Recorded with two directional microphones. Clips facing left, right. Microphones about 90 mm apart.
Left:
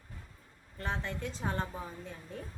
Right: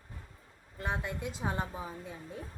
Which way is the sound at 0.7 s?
10° right (ahead or behind).